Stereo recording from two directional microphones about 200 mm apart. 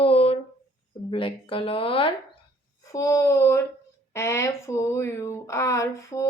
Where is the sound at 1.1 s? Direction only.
25° left (ahead or behind).